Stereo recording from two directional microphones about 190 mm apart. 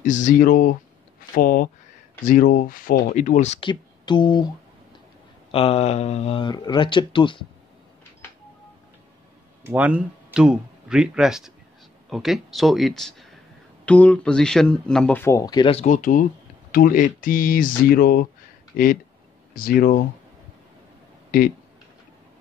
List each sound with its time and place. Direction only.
0.0 s speech: 40° left (ahead or behind)
3.6 s speech: 25° left (ahead or behind)
5.5 s speech: 30° left (ahead or behind)
9.6 s speech: 10° right (ahead or behind); by 15.8 s 25° left (ahead or behind)
15.8 s speech: 45° left (ahead or behind)